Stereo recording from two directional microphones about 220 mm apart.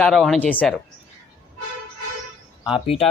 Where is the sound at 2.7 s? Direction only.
25° left (ahead or behind).